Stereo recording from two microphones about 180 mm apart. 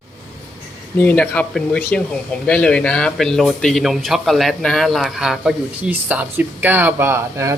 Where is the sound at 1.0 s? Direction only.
10° left (ahead or behind).